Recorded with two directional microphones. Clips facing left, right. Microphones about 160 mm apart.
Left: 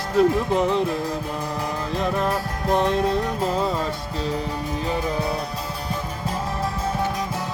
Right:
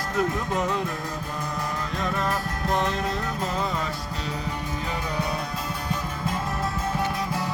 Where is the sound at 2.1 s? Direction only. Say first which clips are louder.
Left 3 dB; 10° left (ahead or behind).